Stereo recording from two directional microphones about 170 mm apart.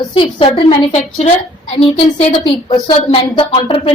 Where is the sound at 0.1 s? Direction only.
30° left (ahead or behind).